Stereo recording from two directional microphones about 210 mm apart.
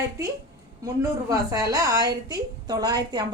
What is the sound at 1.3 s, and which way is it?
A woman's voice, 15° right (ahead or behind).